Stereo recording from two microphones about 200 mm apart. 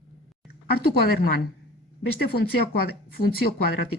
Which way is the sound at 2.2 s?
50° left (ahead or behind).